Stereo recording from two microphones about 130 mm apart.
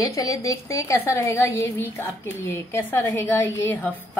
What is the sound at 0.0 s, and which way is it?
A woman's voice, 25° left (ahead or behind).